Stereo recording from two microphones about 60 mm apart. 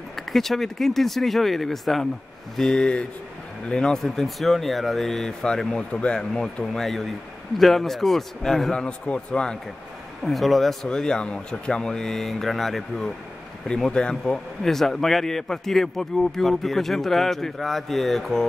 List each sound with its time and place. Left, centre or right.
0.1 s speech: centre
6.3 s speech: centre
8.8 s speech: centre
10.2 s speech: centre